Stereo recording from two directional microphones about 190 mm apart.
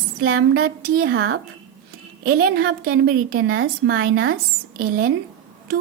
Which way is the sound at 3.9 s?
50° right (ahead or behind).